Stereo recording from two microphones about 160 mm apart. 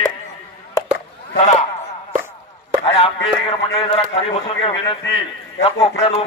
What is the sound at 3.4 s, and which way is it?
A man's voice, 35° left (ahead or behind).